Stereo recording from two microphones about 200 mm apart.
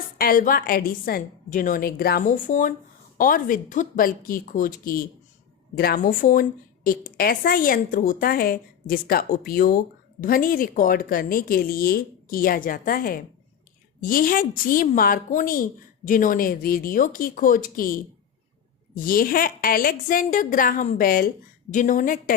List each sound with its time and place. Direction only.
0.2 s a woman's voice: 45° left (ahead or behind)